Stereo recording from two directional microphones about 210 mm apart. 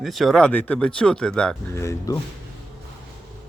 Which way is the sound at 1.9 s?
15° left (ahead or behind).